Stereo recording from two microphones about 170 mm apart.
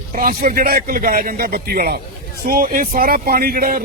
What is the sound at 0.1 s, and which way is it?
A man's voice, 55° right (ahead or behind).